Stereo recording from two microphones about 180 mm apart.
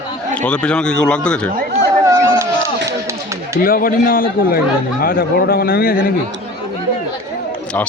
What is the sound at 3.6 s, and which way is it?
A man's voice, 50° left (ahead or behind).